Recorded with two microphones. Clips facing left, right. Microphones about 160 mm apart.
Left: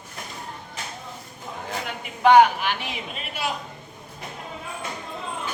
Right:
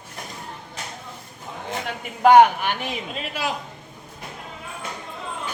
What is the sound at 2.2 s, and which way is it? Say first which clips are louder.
Speech: right 2 dB; 50° right (ahead or behind).